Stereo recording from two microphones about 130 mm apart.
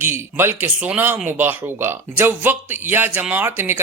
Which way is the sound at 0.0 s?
15° right (ahead or behind).